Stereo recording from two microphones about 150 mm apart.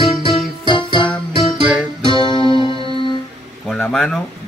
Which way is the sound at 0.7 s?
35° left (ahead or behind).